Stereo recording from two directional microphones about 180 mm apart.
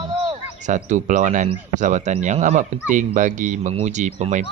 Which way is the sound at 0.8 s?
45° right (ahead or behind).